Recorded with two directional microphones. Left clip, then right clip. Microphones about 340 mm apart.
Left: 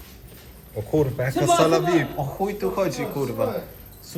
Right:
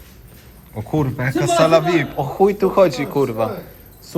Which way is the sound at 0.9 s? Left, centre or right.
Centre.